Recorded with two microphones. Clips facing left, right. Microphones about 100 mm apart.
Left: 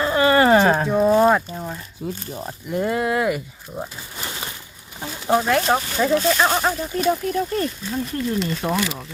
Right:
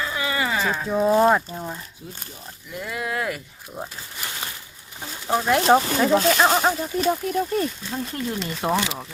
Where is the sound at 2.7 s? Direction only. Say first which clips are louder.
Left 9 dB; 40° left (ahead or behind).